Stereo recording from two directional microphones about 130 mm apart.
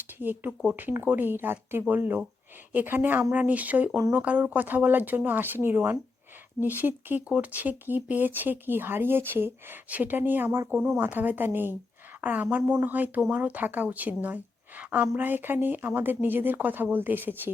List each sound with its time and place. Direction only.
0.2 s speech: 15° right (ahead or behind)